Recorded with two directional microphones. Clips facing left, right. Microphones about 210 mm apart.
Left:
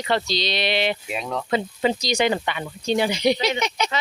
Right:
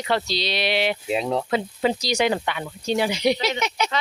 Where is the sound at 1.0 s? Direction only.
30° right (ahead or behind).